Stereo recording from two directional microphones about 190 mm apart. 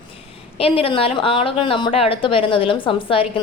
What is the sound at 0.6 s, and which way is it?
A woman's voice, 30° left (ahead or behind).